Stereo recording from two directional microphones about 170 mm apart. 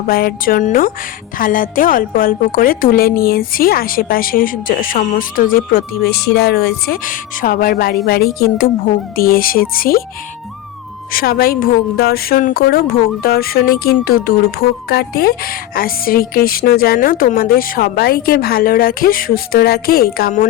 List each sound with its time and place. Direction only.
0.1 s a woman's voice: 60° left (ahead or behind)
11.1 s a woman's voice: 60° left (ahead or behind)